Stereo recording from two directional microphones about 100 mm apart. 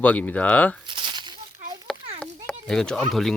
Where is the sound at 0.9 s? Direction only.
55° right (ahead or behind).